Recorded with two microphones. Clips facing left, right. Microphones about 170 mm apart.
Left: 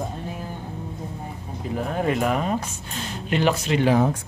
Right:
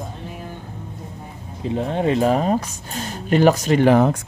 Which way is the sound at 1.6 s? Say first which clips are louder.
Right 4 dB; 25° right (ahead or behind).